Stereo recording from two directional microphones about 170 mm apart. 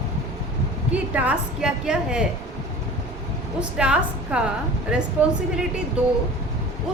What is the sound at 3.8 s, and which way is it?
A woman's voice, 5° right (ahead or behind).